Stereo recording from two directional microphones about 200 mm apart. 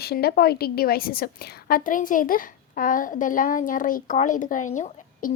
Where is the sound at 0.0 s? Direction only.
50° left (ahead or behind).